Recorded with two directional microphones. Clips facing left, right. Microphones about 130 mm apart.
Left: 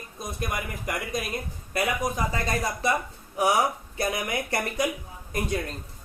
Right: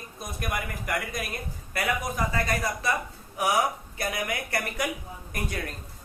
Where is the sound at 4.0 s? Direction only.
25° left (ahead or behind).